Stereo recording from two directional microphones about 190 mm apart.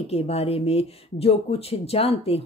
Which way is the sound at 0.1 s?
35° left (ahead or behind).